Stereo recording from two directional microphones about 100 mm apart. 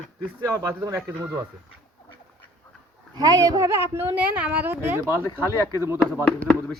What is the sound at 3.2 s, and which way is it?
A woman's voice, 40° right (ahead or behind).